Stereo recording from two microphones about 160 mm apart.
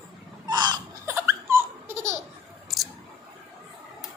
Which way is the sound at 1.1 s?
15° right (ahead or behind).